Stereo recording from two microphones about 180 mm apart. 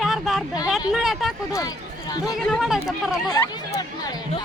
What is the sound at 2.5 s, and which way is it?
Speech, centre (ahead or behind).